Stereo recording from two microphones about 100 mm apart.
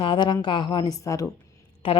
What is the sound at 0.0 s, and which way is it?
Speech, 50° left (ahead or behind).